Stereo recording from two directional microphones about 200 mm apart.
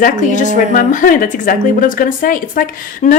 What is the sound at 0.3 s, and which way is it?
A woman's voice, 40° left (ahead or behind).